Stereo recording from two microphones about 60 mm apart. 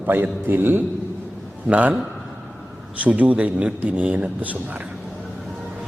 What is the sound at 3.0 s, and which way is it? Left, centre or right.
A man's voice, right.